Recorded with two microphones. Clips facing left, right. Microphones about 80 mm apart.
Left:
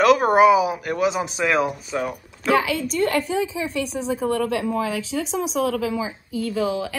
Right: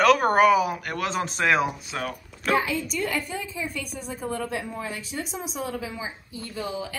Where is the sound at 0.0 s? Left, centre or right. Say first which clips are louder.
Left 3 dB; centre.